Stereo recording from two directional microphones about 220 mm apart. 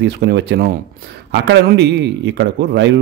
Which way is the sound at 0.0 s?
50° right (ahead or behind).